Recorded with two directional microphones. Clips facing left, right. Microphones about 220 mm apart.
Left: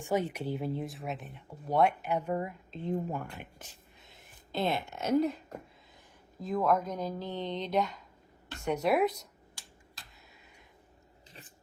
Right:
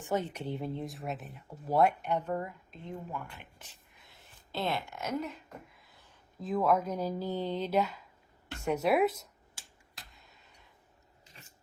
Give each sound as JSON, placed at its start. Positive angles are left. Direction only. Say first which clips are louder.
{"t": 0.0, "sound": "speech", "louder": "left 2 dB", "side_deg": 10}
{"t": 4.0, "sound": "a sound", "louder": "even", "side_deg": 20}
{"t": 6.4, "sound": "a woman's voice", "louder": "even", "side_deg": 0}